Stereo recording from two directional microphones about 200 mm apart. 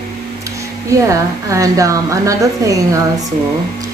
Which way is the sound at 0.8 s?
15° right (ahead or behind).